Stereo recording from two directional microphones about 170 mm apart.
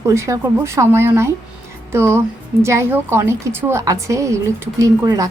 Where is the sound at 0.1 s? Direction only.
15° right (ahead or behind).